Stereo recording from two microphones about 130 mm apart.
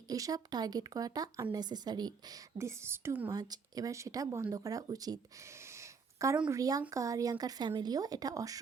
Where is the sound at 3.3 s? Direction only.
30° right (ahead or behind).